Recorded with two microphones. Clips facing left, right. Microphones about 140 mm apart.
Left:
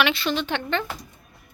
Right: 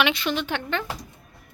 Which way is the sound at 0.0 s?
15° right (ahead or behind).